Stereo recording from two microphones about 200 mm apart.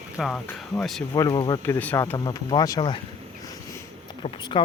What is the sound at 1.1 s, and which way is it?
Speech, 20° left (ahead or behind).